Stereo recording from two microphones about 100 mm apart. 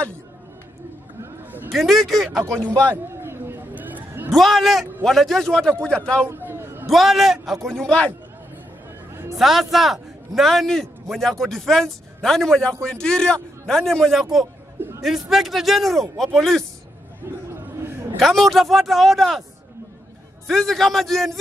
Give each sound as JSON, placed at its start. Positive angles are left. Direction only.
{"t": 1.2, "sound": "a sound", "side_deg": -20}
{"t": 1.7, "sound": "a man's voice", "side_deg": 0}
{"t": 2.6, "sound": "a man's voice", "side_deg": 15}
{"t": 2.9, "sound": "a sound", "side_deg": -25}
{"t": 4.3, "sound": "a man's voice", "side_deg": 0}
{"t": 6.2, "sound": "a sound", "side_deg": -20}
{"t": 6.9, "sound": "a man's voice", "side_deg": 0}
{"t": 9.4, "sound": "a man's voice", "side_deg": 0}
{"t": 14.8, "sound": "a sound", "side_deg": -25}
{"t": 15.0, "sound": "a man's voice", "side_deg": 0}
{"t": 17.5, "sound": "chatter", "side_deg": -25}
{"t": 18.2, "sound": "a man's voice", "side_deg": 0}
{"t": 20.4, "sound": "a man's voice", "side_deg": 0}